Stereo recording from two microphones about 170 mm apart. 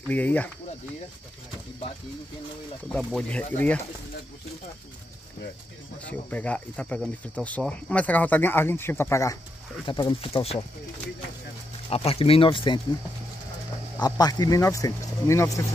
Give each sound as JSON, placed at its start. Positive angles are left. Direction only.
{"t": 0.1, "sound": "speech", "side_deg": 10}
{"t": 2.9, "sound": "speech", "side_deg": 0}
{"t": 6.0, "sound": "speech", "side_deg": 10}
{"t": 9.8, "sound": "speech", "side_deg": 30}
{"t": 11.9, "sound": "speech", "side_deg": 35}
{"t": 14.0, "sound": "speech", "side_deg": 25}